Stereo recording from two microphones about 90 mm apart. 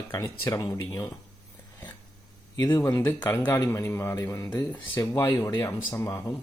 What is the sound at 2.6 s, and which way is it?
Speech, 30° left (ahead or behind).